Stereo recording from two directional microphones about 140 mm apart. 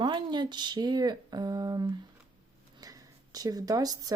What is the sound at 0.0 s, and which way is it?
Speech, 30° right (ahead or behind).